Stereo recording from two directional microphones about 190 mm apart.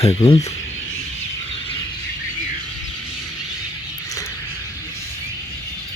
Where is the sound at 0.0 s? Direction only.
30° left (ahead or behind).